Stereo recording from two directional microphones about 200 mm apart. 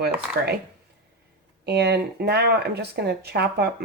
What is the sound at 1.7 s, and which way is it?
Speech, 55° right (ahead or behind).